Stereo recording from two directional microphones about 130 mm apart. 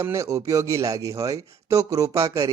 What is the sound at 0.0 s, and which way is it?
Speech, 20° right (ahead or behind).